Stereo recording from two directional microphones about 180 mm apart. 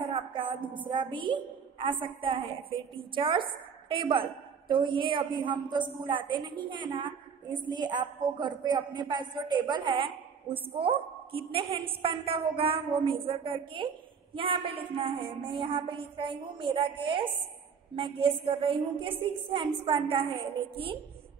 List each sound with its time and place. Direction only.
0.0 s a sound: 30° right (ahead or behind)
0.7 s a woman's voice: 25° right (ahead or behind)
3.2 s a woman's voice: 30° right (ahead or behind)